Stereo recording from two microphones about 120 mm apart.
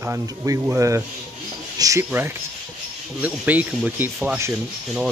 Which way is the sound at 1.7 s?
30° right (ahead or behind).